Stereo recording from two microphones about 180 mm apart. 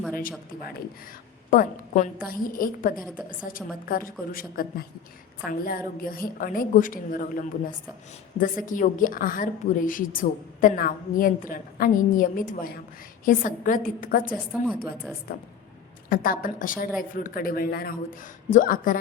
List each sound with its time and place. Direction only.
0.2 s a woman's voice: 50° left (ahead or behind)
14.3 s a woman's voice: 5° right (ahead or behind)
16.0 s a woman's voice: 50° left (ahead or behind)